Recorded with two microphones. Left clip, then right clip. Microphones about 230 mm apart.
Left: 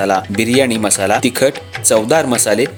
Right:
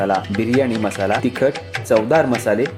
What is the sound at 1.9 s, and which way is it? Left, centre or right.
Speech, left.